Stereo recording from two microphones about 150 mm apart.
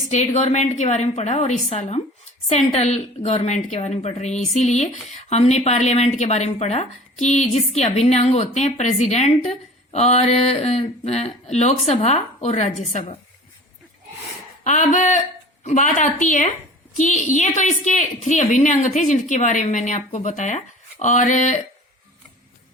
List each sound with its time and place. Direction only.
0.1 s speech: 50° left (ahead or behind)
14.6 s a woman's voice: 55° left (ahead or behind)